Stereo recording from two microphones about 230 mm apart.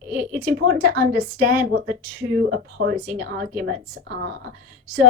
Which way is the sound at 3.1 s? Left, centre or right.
Right.